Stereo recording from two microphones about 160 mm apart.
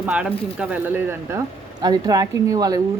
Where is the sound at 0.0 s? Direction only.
5° right (ahead or behind).